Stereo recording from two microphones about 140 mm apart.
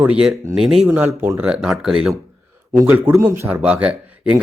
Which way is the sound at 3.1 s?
20° right (ahead or behind).